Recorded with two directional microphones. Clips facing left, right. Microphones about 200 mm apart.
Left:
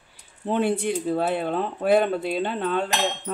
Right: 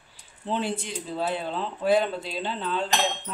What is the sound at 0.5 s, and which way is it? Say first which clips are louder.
Speech: left 6 dB; 60° left (ahead or behind).